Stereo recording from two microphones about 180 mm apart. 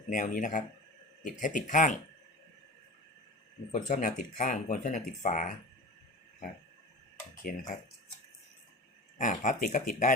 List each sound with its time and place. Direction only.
0.1 s speech: 45° left (ahead or behind)
3.7 s speech: 40° left (ahead or behind)
7.5 s speech: 50° left (ahead or behind)
9.1 s speech: 45° left (ahead or behind)